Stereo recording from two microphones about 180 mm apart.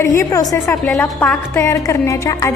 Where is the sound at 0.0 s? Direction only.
15° left (ahead or behind).